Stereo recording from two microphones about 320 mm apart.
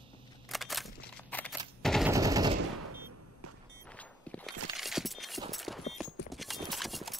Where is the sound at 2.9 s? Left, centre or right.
Right.